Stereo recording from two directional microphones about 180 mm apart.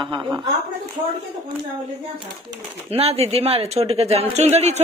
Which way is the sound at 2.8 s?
35° right (ahead or behind).